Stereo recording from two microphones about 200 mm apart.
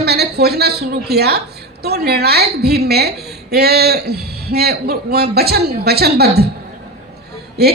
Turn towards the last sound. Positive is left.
turn(degrees=-50)  # may be behind; listen again after turning